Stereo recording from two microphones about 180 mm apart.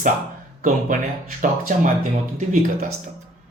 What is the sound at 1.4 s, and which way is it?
Speech, 45° right (ahead or behind).